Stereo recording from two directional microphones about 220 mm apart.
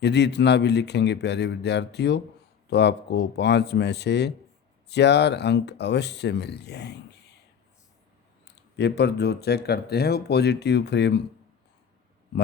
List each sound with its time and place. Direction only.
0.0 s speech: 50° left (ahead or behind)
8.4 s speech: 50° left (ahead or behind)